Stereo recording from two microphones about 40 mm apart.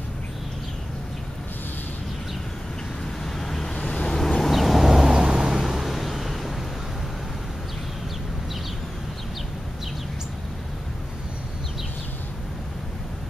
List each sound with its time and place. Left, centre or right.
3.3 s vehicle: centre
3.7 s vehicle: left
4.4 s vehicle: centre
5.6 s vehicle: centre